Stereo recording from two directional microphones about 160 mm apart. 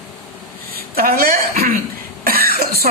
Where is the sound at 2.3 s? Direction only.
70° right (ahead or behind).